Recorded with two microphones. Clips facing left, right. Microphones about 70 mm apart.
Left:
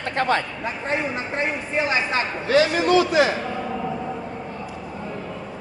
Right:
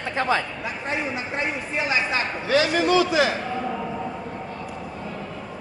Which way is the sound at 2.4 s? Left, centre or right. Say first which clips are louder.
Left 2 dB; left.